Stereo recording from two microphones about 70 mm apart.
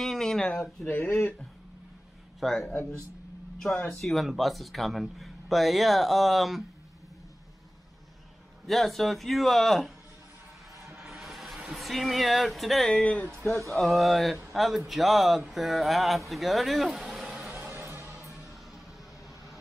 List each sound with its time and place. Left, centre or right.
0.0 s a sound: centre
0.9 s speech: left
2.4 s speech: centre
8.6 s speech: centre
11.0 s a sound: centre
11.8 s speech: centre
12.9 s speech: centre
13.7 s a man's voice: centre
17.5 s music: right